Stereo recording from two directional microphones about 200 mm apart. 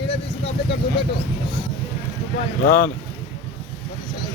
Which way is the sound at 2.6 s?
45° left (ahead or behind).